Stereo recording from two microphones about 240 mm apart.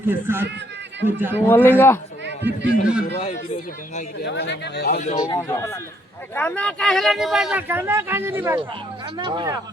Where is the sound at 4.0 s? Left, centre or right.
Left.